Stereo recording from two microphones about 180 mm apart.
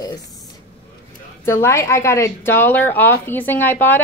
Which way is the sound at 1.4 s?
15° left (ahead or behind).